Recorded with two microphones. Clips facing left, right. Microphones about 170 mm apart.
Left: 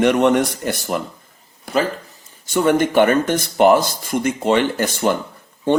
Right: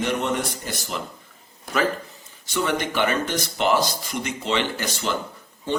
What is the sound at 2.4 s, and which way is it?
A man's voice, 50° left (ahead or behind).